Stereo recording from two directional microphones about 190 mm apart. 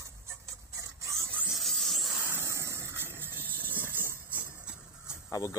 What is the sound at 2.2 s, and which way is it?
Vehicle, 15° right (ahead or behind).